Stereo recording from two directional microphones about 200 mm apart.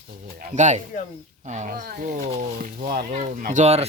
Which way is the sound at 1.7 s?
45° right (ahead or behind).